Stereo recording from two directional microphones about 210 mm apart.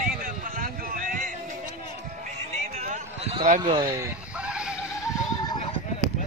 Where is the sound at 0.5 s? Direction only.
40° right (ahead or behind).